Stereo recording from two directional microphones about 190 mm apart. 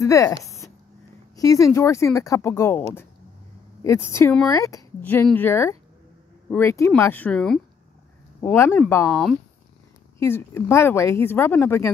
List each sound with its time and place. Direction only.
0.0 s speech: 15° left (ahead or behind)